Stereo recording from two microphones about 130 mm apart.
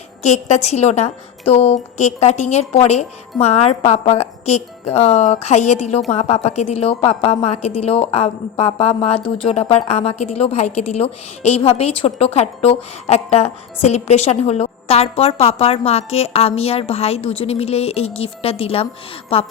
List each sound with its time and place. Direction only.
0.2 s a woman's voice: 60° left (ahead or behind)